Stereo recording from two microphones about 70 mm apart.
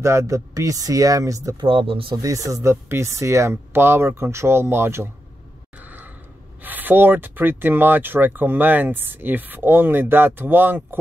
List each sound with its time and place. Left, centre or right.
0.0 s speech: right
2.7 s speech: right
5.8 s a sound: right
6.6 s speech: right